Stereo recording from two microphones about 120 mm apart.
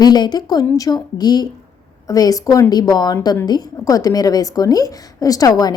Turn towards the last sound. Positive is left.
turn(degrees=35)  # may be behind; listen again after turning